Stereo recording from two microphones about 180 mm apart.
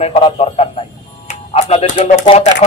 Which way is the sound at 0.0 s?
35° left (ahead or behind).